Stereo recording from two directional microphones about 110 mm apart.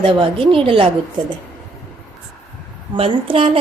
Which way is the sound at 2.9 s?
55° right (ahead or behind).